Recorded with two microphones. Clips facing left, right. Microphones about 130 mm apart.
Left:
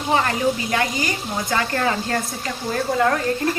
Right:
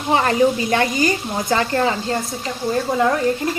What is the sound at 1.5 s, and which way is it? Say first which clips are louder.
Speech: right 2 dB; 25° right (ahead or behind).